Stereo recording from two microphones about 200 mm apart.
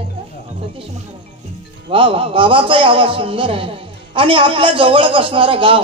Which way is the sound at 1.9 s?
25° right (ahead or behind).